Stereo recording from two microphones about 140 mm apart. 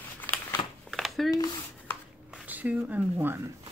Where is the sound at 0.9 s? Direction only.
Centre (ahead or behind).